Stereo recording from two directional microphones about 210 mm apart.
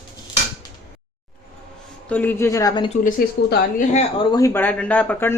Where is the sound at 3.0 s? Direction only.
35° left (ahead or behind).